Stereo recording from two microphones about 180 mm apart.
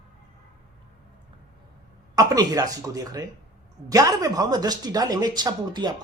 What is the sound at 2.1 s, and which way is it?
Speech, 20° right (ahead or behind).